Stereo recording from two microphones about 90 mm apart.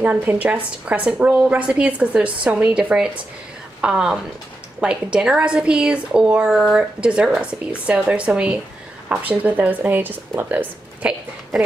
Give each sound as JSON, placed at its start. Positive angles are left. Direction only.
{"t": 0.0, "sound": "a woman's voice", "side_deg": -20}
{"t": 3.8, "sound": "a woman's voice", "side_deg": -5}